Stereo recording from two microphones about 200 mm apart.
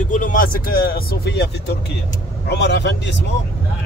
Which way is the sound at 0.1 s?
40° left (ahead or behind).